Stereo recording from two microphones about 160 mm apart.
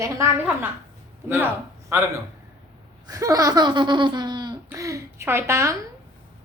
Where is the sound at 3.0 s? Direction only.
20° right (ahead or behind).